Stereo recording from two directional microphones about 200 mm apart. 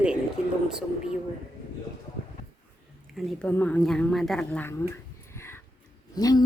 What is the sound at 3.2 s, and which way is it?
Speech, centre (ahead or behind).